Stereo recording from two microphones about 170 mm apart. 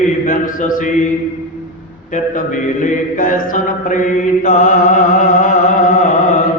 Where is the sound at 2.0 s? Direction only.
50° left (ahead or behind).